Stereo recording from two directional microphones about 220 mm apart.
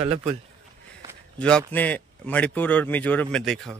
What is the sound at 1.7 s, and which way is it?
A man's voice, 5° left (ahead or behind).